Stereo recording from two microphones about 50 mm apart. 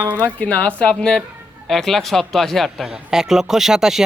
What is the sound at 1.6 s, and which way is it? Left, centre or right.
Speech, centre.